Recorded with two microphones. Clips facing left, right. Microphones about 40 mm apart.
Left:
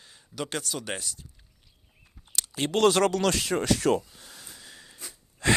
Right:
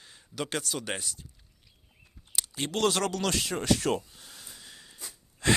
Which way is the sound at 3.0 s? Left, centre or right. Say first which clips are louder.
Left 7 dB; left.